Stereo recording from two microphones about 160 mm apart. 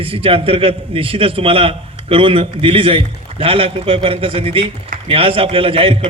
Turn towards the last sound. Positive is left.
turn(degrees=-35)  # may be behind; listen again after turning